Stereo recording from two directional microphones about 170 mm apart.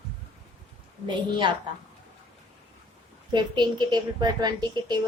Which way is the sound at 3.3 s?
25° right (ahead or behind).